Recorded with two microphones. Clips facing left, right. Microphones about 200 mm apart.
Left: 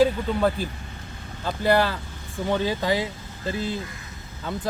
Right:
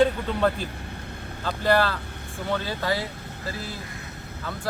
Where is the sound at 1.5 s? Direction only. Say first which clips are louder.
Left 1 dB; 15° left (ahead or behind).